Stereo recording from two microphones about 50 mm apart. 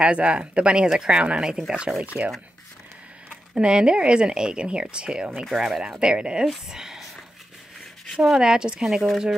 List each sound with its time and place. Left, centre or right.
0.0 s speech: right
3.5 s speech: centre
5.3 s speech: centre
5.6 s speech: centre
8.2 s speech: centre
8.8 s speech: centre